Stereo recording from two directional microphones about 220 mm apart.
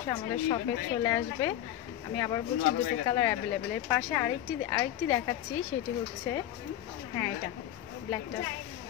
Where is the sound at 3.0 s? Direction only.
15° left (ahead or behind).